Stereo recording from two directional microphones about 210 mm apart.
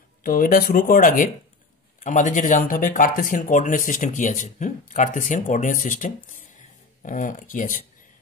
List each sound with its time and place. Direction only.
0.2 s speech: 45° left (ahead or behind)